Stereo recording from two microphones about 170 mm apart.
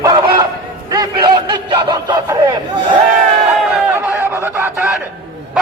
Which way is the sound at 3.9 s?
10° right (ahead or behind).